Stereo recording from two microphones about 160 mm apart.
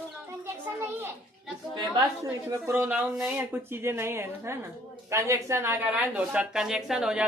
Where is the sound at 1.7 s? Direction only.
25° right (ahead or behind).